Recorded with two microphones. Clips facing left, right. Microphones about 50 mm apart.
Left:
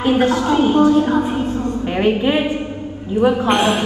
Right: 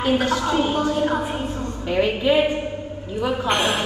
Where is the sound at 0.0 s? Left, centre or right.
Left.